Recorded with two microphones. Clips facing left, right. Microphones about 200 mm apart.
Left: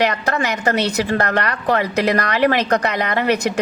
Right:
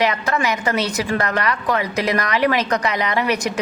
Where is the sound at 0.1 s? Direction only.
40° left (ahead or behind).